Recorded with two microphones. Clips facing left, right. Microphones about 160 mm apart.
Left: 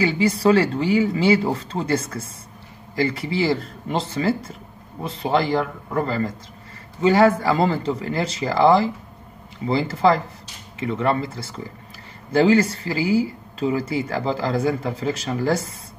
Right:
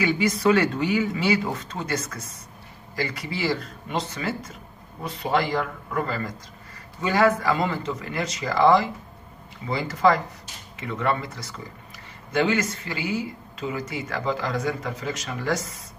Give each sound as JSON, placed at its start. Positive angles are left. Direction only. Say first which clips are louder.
{"t": 0.0, "sound": "speech", "louder": "left 3 dB", "side_deg": 30}